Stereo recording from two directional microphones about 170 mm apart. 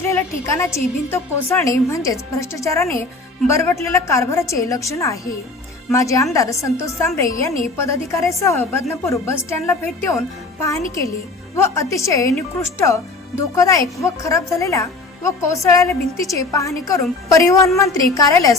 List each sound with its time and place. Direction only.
0.0 s a woman's voice: 15° left (ahead or behind)